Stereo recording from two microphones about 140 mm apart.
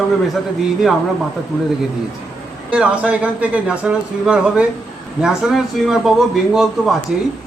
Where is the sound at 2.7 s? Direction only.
10° right (ahead or behind).